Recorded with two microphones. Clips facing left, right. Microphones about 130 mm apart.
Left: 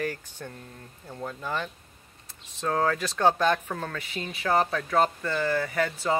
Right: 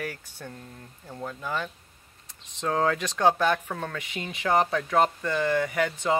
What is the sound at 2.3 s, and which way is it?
Speech, 20° right (ahead or behind).